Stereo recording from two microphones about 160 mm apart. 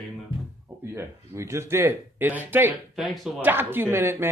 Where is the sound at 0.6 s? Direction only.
15° right (ahead or behind).